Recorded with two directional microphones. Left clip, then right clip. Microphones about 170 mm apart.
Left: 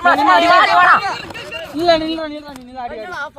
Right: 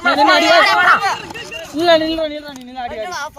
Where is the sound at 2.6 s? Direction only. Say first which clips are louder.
Right 1 dB; 65° right (ahead or behind).